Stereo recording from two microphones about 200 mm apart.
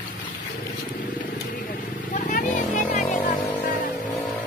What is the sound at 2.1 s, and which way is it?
Vehicle, 40° left (ahead or behind).